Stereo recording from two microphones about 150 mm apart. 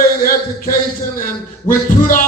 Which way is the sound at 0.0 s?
75° left (ahead or behind).